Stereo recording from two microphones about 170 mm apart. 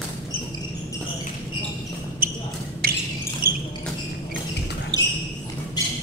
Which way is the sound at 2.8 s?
60° right (ahead or behind).